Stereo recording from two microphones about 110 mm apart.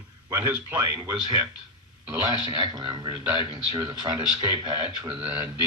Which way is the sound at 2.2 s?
40° right (ahead or behind).